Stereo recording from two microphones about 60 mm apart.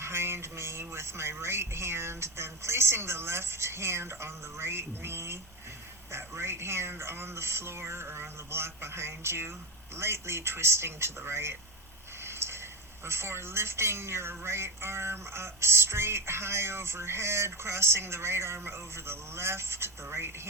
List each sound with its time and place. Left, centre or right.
0.0 s speech: right
12.2 s a sound: right
13.1 s speech: right